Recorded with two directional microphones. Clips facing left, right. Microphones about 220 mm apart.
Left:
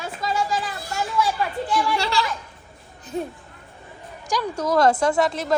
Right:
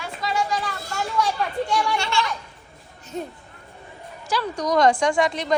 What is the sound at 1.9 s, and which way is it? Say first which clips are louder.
Speech: left 1 dB; 35° left (ahead or behind).